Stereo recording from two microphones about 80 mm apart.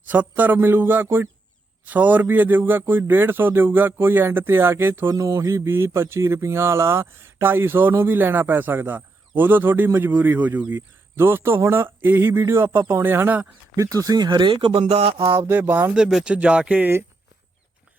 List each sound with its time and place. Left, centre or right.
0.1 s speech: right
5.1 s speech: right
13.7 s speech: right
14.3 s speech: right
15.5 s speech: right
16.0 s speech: centre